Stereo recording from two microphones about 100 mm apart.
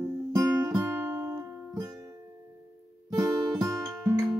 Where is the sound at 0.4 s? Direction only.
35° right (ahead or behind).